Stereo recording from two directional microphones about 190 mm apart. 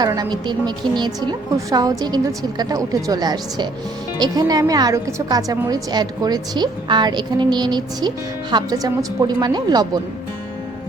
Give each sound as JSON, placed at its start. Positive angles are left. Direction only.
{"t": 0.0, "sound": "a woman's voice", "side_deg": -20}